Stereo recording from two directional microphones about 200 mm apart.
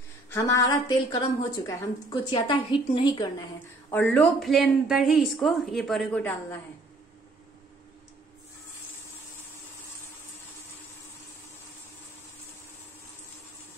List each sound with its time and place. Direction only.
0.3 s a woman's voice: 15° left (ahead or behind)
3.9 s a woman's voice: 10° left (ahead or behind)